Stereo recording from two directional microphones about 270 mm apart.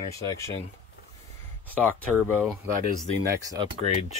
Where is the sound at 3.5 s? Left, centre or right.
Centre.